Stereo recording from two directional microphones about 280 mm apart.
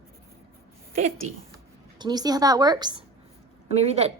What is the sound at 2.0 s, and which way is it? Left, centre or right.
A woman's voice, centre.